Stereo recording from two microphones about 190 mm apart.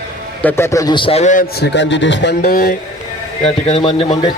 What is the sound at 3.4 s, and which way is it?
Speech, 30° left (ahead or behind).